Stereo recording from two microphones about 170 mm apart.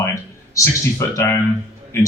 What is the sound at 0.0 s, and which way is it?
A man's voice, 15° left (ahead or behind).